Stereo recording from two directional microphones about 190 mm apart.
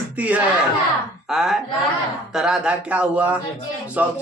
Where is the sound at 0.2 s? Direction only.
10° right (ahead or behind).